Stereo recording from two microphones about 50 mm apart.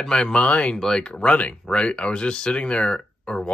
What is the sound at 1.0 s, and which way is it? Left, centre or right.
Speech, left.